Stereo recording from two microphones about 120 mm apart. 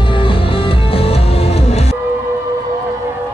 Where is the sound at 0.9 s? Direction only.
55° left (ahead or behind).